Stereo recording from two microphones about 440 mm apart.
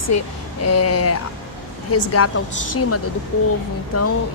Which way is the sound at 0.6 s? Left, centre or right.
Left.